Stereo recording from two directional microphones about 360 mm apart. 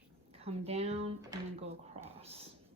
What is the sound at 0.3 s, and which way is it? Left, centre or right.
Drawer open or close, centre.